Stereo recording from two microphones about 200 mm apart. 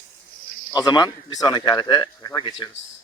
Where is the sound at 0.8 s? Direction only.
20° left (ahead or behind).